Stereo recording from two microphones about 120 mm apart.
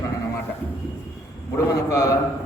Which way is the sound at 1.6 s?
25° left (ahead or behind).